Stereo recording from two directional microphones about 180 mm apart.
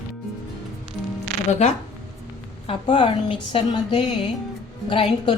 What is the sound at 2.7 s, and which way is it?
Speech, 25° left (ahead or behind).